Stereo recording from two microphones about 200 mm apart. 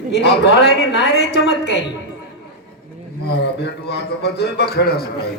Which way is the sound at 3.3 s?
55° left (ahead or behind).